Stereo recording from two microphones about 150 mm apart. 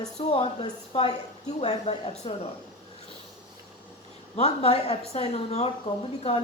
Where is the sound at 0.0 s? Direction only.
45° left (ahead or behind).